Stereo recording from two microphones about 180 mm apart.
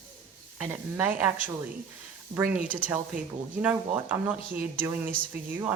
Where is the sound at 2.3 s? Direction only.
15° right (ahead or behind).